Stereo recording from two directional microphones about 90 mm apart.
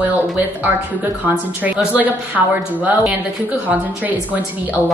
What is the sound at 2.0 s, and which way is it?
Speech, 15° right (ahead or behind).